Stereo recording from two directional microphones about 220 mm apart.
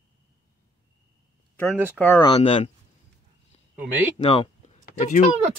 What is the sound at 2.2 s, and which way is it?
Speech, 25° left (ahead or behind).